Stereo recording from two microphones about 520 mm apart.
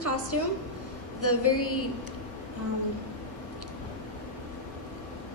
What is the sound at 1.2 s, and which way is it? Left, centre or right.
Speech, left.